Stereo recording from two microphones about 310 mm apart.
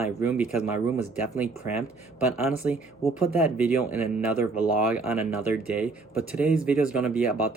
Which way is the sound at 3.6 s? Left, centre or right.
Centre.